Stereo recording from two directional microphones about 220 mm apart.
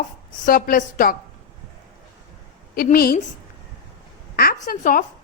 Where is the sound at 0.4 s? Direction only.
40° left (ahead or behind).